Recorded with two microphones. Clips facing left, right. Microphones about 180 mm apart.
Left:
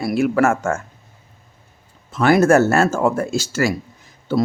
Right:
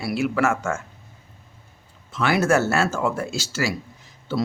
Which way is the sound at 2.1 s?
45° left (ahead or behind).